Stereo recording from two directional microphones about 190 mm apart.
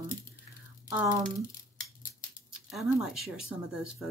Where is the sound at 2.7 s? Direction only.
Centre (ahead or behind).